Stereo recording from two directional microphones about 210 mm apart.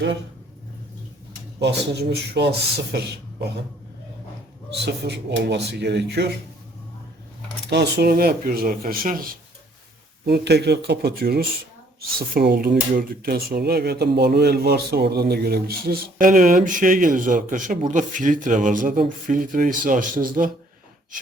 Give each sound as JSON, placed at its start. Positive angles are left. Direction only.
{"t": 1.6, "sound": "speech", "side_deg": -50}
{"t": 4.9, "sound": "speech", "side_deg": -55}
{"t": 7.7, "sound": "speech", "side_deg": -50}